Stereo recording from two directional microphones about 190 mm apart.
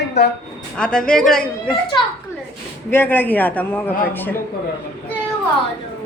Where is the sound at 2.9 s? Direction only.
10° left (ahead or behind).